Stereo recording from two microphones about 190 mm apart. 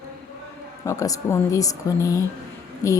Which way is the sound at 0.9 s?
15° left (ahead or behind).